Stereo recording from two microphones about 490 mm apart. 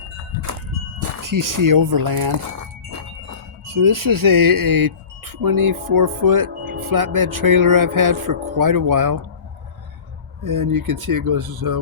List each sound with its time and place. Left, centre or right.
0.9 s speech: right
3.7 s speech: right
10.4 s speech: right